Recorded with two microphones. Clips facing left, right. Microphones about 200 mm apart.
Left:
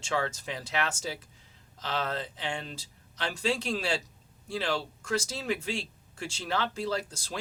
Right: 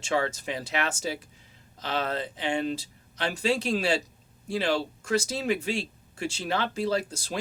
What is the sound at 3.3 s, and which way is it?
Speech, 15° right (ahead or behind).